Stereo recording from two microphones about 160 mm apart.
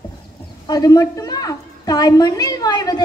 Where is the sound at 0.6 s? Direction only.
25° left (ahead or behind).